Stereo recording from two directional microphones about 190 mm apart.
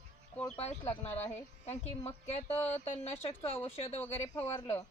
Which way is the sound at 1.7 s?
35° left (ahead or behind).